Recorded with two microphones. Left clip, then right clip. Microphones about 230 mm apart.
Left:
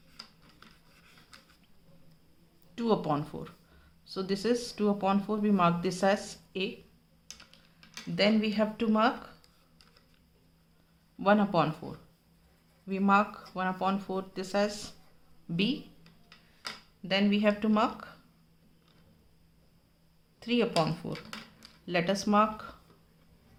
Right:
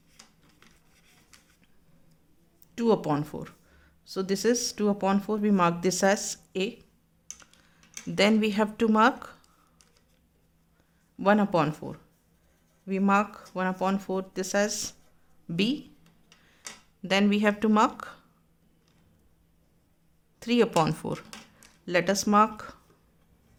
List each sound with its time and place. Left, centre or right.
0.9 s a sound: centre
2.7 s speech: right
8.1 s speech: right
11.2 s speech: right
17.0 s speech: right
20.4 s speech: right